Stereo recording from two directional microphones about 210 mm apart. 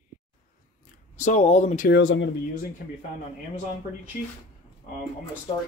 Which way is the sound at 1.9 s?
60° left (ahead or behind).